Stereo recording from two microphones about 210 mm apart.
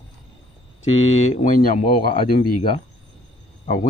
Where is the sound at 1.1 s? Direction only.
35° left (ahead or behind).